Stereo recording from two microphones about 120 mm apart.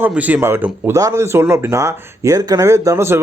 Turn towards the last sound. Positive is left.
turn(degrees=-25)  # may be behind; listen again after turning